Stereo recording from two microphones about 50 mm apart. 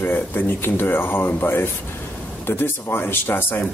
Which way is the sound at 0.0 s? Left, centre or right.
Left.